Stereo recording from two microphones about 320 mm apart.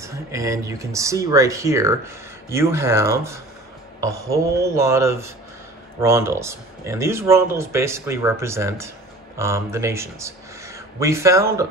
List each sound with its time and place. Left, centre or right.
0.0 s speech: centre